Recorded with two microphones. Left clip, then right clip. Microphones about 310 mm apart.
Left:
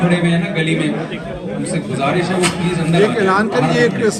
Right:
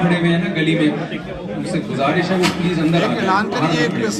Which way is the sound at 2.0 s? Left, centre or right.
Left.